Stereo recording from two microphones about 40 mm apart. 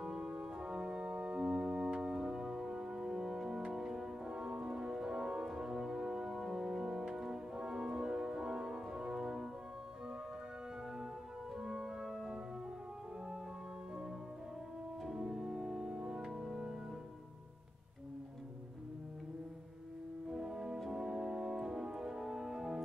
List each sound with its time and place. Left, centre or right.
0.0 s organ: centre
8.9 s music: centre
11.6 s organ: centre
15.2 s organ: centre
20.2 s music: centre
20.9 s organ: centre